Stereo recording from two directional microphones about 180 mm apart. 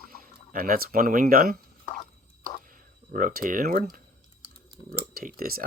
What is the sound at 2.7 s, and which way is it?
Speech, 50° right (ahead or behind).